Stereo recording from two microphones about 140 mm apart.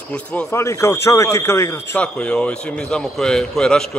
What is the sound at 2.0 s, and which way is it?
A man's voice, 10° left (ahead or behind).